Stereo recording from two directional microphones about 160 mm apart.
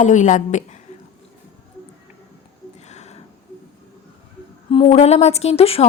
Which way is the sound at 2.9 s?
45° left (ahead or behind).